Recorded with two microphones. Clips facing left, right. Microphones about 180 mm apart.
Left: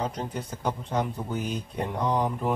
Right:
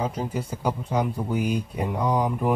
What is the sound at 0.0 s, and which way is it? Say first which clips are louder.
Speech: right 3 dB; 5° right (ahead or behind).